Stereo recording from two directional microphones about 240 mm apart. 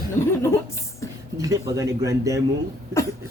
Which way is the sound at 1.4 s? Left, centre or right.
Centre.